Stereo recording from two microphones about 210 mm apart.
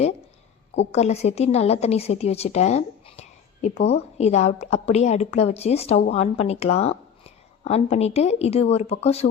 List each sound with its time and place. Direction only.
0.9 s a woman's voice: 30° left (ahead or behind)